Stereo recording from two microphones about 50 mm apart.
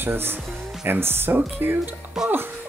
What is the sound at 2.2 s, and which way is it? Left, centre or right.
Speech, centre.